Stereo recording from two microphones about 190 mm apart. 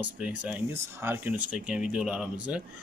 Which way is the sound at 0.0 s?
5° right (ahead or behind).